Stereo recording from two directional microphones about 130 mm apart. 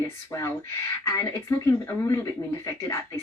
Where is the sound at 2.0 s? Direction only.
20° left (ahead or behind).